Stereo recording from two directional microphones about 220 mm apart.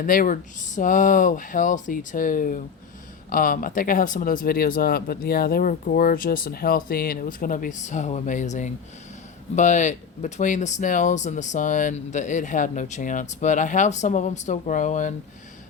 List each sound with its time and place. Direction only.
0.0 s speech: 40° left (ahead or behind)